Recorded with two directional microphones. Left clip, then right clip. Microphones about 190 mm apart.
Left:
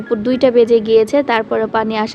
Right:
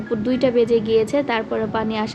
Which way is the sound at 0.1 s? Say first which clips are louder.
Left 6 dB; 30° left (ahead or behind).